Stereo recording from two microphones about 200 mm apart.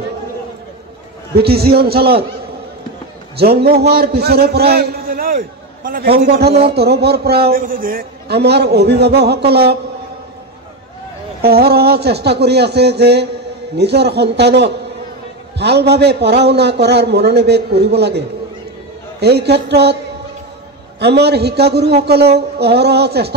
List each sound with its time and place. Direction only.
1.3 s a man's voice: 50° right (ahead or behind)
3.3 s a man's voice: 50° right (ahead or behind)
11.4 s a man's voice: 50° right (ahead or behind)
21.0 s a man's voice: 55° right (ahead or behind)